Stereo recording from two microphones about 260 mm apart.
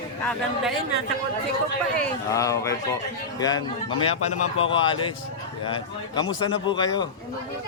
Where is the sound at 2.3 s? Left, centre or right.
Centre.